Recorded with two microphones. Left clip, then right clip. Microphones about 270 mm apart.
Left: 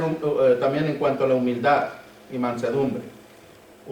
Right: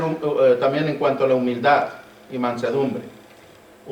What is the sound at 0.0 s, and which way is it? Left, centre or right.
Speech, right.